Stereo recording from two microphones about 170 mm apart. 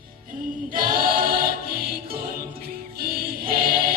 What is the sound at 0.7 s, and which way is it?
Choir, 60° right (ahead or behind).